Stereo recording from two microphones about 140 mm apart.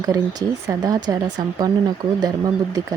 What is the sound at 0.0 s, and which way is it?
Speech, 25° right (ahead or behind).